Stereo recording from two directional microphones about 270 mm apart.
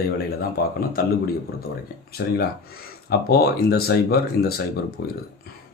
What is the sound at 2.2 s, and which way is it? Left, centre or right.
Speech, left.